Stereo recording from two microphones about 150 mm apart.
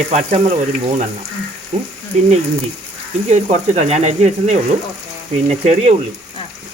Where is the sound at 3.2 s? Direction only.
50° right (ahead or behind).